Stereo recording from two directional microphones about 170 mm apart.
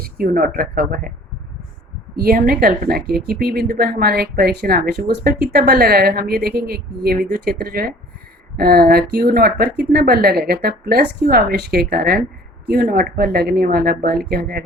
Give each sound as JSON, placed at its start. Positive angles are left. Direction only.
{"t": 0.0, "sound": "a woman's voice", "side_deg": -60}
{"t": 2.1, "sound": "a woman's voice", "side_deg": -55}